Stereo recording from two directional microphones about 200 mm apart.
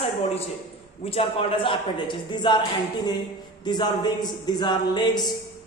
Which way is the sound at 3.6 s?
20° left (ahead or behind).